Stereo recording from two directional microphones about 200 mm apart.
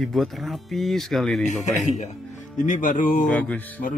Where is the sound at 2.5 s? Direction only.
40° left (ahead or behind).